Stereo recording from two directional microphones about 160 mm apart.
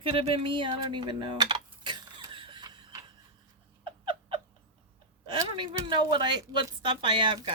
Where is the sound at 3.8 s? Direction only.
30° right (ahead or behind).